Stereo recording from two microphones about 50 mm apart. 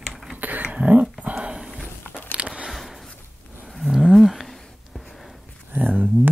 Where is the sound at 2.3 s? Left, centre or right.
Right.